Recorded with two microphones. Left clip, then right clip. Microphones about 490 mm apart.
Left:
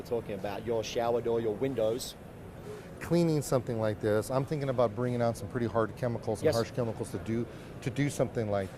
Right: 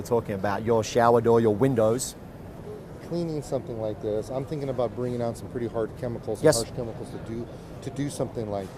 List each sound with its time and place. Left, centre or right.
0.1 s speech: right
3.1 s speech: left
6.4 s speech: right
7.9 s speech: left